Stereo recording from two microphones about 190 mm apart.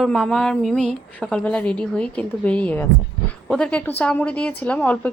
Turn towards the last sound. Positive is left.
turn(degrees=5)  # may be behind; listen again after turning